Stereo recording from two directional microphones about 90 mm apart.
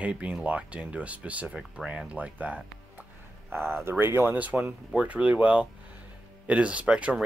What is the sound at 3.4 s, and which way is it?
Speech, 25° right (ahead or behind).